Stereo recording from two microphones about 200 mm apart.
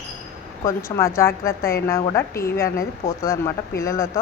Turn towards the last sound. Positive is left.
turn(degrees=15)  # may be behind; listen again after turning